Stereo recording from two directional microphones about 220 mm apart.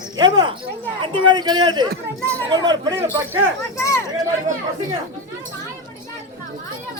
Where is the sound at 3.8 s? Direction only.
15° left (ahead or behind).